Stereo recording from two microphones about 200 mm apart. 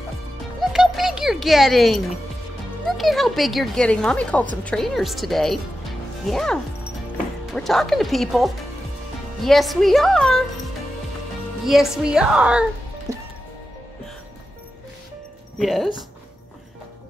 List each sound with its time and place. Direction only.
0.6 s music: centre (ahead or behind)
2.9 s speech: centre (ahead or behind)
11.6 s speech: centre (ahead or behind)
13.1 s music: 15° right (ahead or behind)
15.6 s speech: centre (ahead or behind)